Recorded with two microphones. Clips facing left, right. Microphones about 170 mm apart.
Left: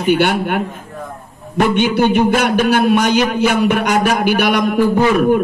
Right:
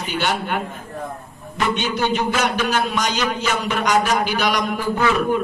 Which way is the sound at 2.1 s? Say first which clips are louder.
Left 7 dB; 55° left (ahead or behind).